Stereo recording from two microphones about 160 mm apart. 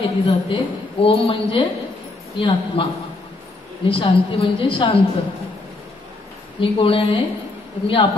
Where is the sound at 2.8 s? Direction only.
35° left (ahead or behind).